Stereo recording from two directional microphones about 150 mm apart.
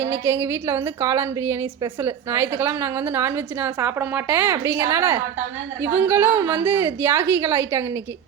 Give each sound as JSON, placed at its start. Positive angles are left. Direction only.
{"t": 0.0, "sound": "a woman's voice", "side_deg": -15}